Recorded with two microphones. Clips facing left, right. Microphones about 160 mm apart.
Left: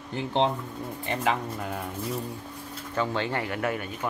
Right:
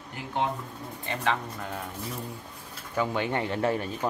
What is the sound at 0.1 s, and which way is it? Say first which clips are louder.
Speech: left 5 dB; 25° left (ahead or behind).